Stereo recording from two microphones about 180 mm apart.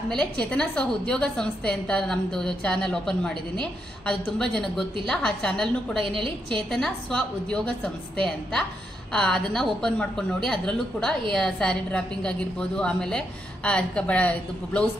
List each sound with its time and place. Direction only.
0.1 s a woman's voice: 5° left (ahead or behind)
6.1 s a woman's voice: 25° right (ahead or behind)
6.7 s a woman's voice: 5° left (ahead or behind)